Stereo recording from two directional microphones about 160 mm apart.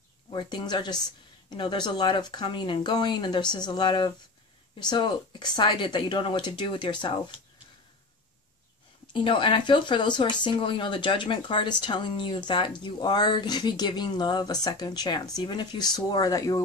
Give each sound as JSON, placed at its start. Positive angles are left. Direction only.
{"t": 0.3, "sound": "speech", "side_deg": 30}
{"t": 9.1, "sound": "speech", "side_deg": 30}